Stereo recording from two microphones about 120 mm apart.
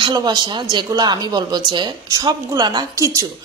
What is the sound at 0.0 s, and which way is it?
A woman's voice, 35° right (ahead or behind).